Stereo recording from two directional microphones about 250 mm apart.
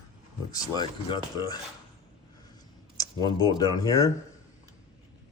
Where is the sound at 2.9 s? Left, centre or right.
Centre.